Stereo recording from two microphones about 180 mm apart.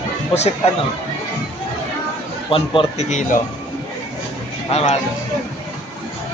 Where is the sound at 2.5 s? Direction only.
30° left (ahead or behind).